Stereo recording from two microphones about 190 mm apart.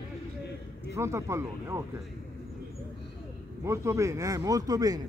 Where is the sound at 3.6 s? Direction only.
15° right (ahead or behind).